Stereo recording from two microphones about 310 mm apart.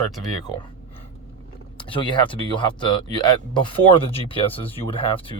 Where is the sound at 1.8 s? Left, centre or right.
Centre.